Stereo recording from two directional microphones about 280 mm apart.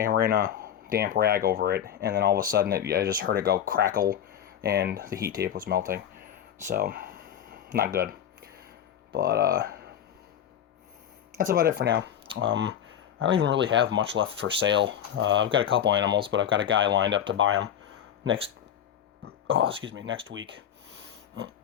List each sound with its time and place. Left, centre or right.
0.0 s speech: right
9.1 s speech: right
11.3 s speech: right
19.2 s a sound: right
19.8 s speech: right